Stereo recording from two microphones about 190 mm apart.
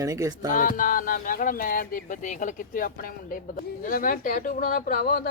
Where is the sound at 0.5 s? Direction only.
45° left (ahead or behind).